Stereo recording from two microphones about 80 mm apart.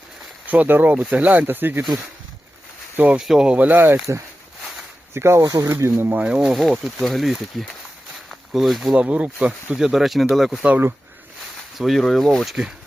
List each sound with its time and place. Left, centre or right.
0.4 s speech: right
2.9 s speech: right
3.2 s speech: centre; by 4.0 s right
5.1 s speech: right
5.4 s speech: right
6.2 s speech: centre
9.7 s speech: centre
11.8 s speech: centre